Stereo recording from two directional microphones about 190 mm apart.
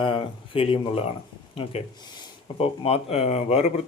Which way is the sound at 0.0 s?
30° left (ahead or behind).